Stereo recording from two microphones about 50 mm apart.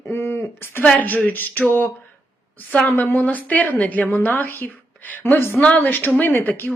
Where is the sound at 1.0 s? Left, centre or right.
Left.